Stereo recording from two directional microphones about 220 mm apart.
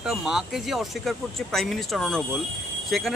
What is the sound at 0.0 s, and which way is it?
Speech, 5° right (ahead or behind).